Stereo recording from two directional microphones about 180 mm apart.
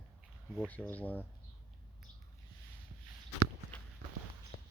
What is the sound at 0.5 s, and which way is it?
Speech, 5° left (ahead or behind).